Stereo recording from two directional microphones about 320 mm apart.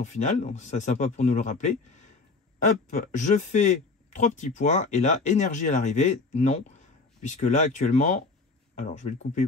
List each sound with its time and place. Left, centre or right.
0.0 s speech: left